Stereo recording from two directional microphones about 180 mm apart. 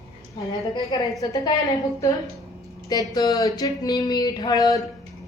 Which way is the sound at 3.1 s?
20° left (ahead or behind).